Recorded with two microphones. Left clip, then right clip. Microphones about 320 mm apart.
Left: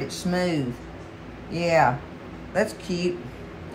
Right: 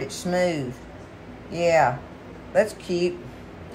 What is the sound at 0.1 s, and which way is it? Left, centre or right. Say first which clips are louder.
Speech: right 4 dB; centre.